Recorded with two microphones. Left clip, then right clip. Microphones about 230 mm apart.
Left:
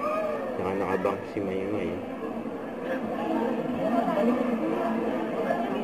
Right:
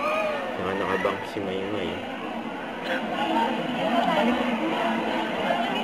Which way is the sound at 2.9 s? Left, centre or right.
Centre.